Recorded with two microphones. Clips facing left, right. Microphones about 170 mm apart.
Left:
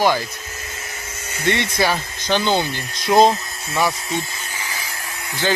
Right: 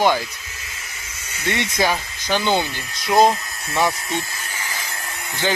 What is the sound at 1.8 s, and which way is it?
Speech, 15° right (ahead or behind).